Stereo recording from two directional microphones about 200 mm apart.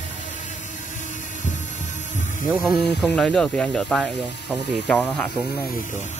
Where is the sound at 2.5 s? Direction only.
5° left (ahead or behind).